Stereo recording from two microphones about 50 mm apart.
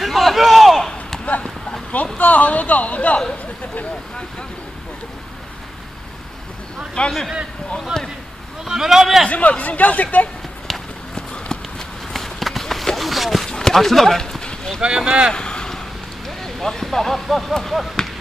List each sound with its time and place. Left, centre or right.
0.0 s a sound: centre
2.1 s speech: left
7.0 s speech: left
7.9 s speech: centre
9.3 s speech: left
10.7 s run: centre
13.5 s a sound: centre
15.0 s speech: centre
15.3 s a sound: centre
16.4 s speech: centre